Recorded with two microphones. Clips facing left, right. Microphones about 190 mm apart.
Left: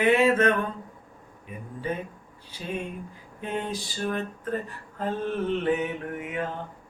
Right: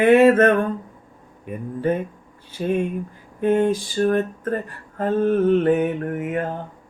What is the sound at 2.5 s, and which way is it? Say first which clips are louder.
Speech: right 12 dB; 50° right (ahead or behind).